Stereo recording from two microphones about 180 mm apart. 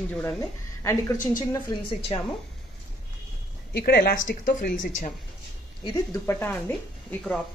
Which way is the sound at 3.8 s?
60° left (ahead or behind).